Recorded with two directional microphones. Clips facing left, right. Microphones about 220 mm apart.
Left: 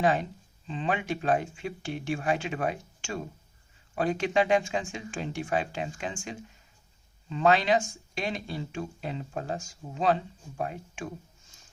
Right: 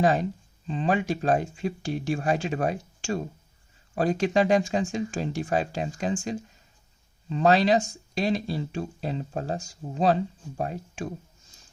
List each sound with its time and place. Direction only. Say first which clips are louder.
0.0 s speech: right 3 dB; 40° right (ahead or behind)